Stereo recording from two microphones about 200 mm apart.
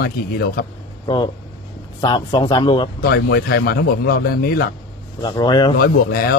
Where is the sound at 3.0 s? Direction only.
55° left (ahead or behind).